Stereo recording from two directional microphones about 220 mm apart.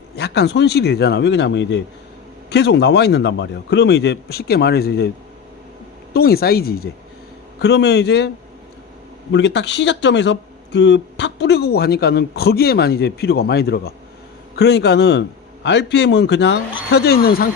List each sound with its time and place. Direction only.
0.2 s speech: 50° left (ahead or behind)
6.1 s speech: 45° left (ahead or behind)
9.3 s speech: 55° left (ahead or behind)